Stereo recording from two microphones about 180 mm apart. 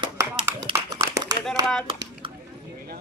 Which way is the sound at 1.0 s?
20° right (ahead or behind).